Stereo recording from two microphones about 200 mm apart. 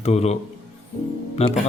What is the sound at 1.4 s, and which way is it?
Speech, 30° left (ahead or behind).